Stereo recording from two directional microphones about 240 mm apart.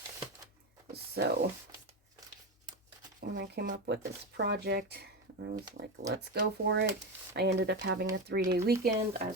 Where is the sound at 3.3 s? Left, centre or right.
Right.